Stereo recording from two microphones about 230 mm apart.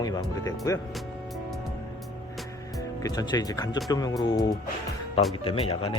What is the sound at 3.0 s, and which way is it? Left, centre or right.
Speech, centre.